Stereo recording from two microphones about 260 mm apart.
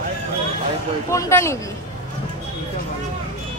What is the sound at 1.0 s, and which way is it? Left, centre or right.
Speech, centre.